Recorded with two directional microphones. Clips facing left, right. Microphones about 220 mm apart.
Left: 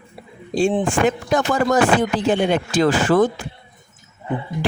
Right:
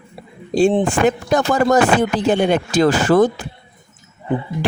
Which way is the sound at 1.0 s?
40° right (ahead or behind).